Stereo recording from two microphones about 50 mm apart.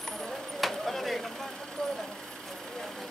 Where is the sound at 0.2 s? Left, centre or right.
Centre.